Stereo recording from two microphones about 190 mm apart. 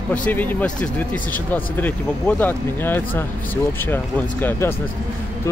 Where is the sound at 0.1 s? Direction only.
10° left (ahead or behind).